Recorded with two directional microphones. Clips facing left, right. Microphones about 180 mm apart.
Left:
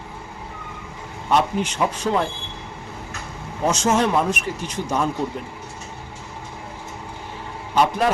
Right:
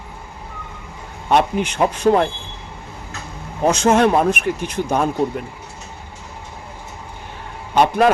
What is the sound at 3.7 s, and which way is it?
Speech, 60° right (ahead or behind).